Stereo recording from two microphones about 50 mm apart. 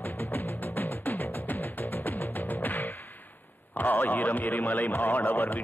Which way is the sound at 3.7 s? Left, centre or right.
Left.